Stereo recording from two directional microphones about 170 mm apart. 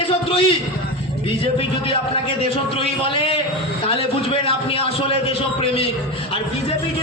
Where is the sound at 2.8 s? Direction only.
30° left (ahead or behind).